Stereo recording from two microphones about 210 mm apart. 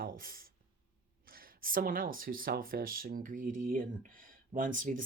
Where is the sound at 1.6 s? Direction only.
40° right (ahead or behind).